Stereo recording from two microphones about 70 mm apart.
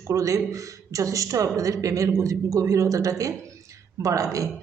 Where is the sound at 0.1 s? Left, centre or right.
Right.